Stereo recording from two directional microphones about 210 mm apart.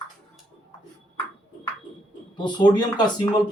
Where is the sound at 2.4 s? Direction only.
20° left (ahead or behind).